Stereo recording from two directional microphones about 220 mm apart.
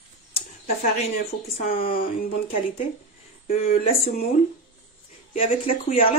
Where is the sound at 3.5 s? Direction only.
30° left (ahead or behind).